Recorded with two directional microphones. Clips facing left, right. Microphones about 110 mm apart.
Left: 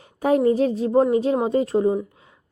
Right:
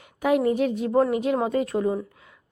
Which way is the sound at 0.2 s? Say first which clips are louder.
Left 3 dB; 35° left (ahead or behind).